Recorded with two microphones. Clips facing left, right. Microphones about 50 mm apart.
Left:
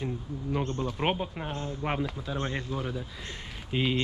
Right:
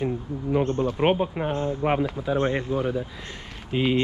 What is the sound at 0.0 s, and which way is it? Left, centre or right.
Speech, centre.